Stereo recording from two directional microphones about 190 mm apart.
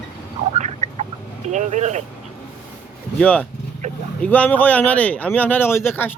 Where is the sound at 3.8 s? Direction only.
40° right (ahead or behind).